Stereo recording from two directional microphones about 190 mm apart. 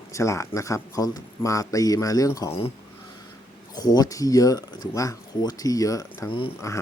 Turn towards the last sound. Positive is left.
turn(degrees=25)  # may be behind; listen again after turning